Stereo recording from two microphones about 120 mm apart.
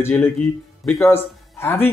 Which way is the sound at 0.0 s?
20° left (ahead or behind).